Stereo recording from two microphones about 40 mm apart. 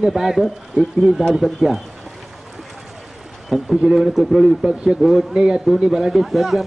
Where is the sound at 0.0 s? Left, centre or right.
Centre.